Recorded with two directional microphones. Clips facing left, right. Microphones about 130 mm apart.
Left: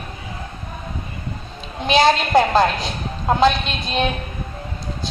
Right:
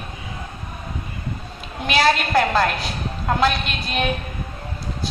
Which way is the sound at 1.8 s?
20° left (ahead or behind).